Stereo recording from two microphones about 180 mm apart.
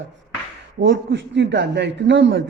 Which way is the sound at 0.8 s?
85° right.